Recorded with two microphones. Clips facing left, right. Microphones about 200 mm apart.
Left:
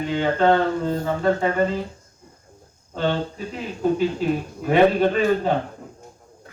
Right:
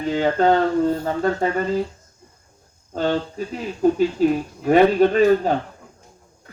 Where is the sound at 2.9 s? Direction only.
40° right (ahead or behind).